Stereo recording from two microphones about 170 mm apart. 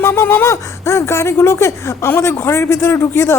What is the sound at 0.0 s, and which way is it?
Speech, 15° left (ahead or behind).